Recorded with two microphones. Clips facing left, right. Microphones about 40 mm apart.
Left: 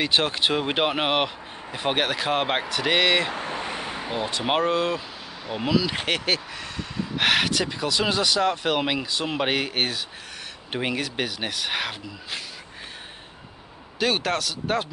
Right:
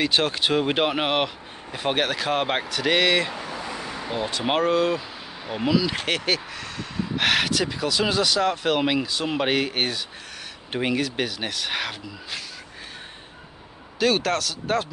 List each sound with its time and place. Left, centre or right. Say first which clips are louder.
0.0 s speech: even; centre
3.3 s vehicle: left 2 dB; left
4.0 s speech: right 2 dB; centre
13.9 s speech: right 2 dB; centre